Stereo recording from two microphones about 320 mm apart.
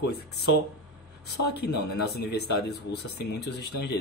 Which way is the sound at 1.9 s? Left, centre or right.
Left.